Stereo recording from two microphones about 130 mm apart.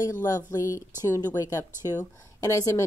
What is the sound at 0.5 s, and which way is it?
A woman's voice, 25° left (ahead or behind).